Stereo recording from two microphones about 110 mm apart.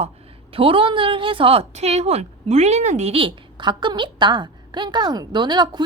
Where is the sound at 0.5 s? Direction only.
55° right (ahead or behind).